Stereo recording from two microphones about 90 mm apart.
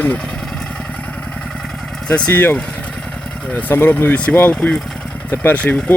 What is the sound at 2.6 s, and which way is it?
Vehicle, 15° left (ahead or behind).